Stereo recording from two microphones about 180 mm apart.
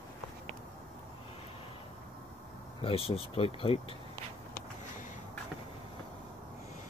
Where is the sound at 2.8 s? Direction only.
30° left (ahead or behind).